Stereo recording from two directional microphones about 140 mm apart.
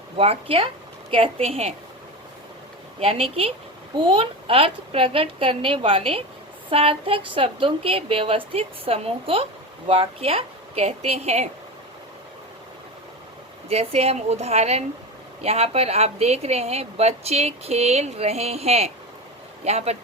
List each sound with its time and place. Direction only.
0.2 s a woman's voice: 45° right (ahead or behind)
3.0 s a woman's voice: 45° right (ahead or behind)
13.7 s a woman's voice: 45° right (ahead or behind)